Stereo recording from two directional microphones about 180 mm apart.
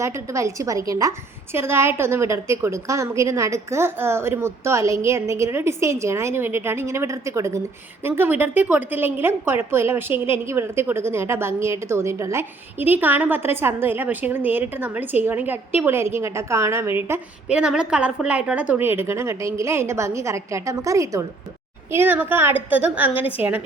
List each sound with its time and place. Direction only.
0.0 s a woman's voice: 15° right (ahead or behind)